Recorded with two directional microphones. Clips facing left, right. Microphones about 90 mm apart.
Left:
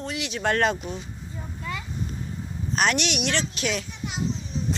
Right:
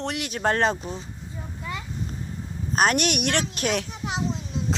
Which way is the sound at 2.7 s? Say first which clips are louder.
Right 3 dB; 45° right (ahead or behind).